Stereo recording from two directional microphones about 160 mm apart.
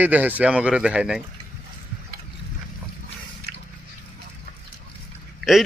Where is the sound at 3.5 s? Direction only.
75° right (ahead or behind).